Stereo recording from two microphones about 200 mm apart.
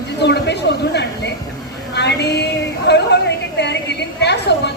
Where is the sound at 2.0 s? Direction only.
60° left (ahead or behind).